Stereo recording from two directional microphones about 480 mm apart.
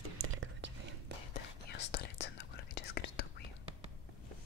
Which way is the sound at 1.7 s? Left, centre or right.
Left.